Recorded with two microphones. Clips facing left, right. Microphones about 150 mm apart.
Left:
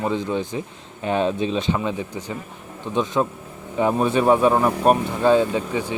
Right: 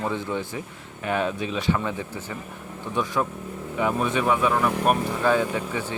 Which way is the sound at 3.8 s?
35° left (ahead or behind).